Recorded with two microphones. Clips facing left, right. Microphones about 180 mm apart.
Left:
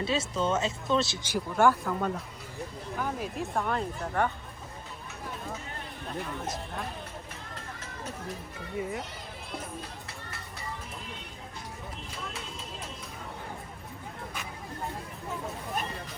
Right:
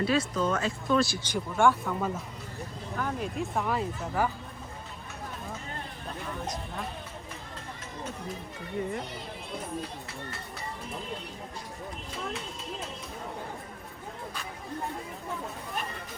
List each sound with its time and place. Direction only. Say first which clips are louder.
0.0 s speech: right 2 dB; 25° left (ahead or behind)
1.3 s speech: left 2 dB; 5° left (ahead or behind)
8.8 s speech: right 1 dB; 5° left (ahead or behind)